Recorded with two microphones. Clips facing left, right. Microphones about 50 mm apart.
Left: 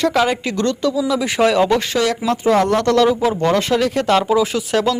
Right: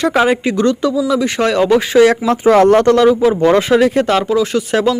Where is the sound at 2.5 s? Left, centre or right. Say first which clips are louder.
Right 7 dB; right.